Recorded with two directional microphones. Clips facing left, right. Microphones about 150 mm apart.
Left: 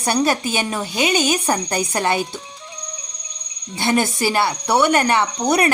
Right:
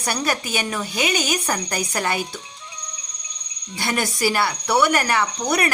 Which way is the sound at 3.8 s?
25° left (ahead or behind).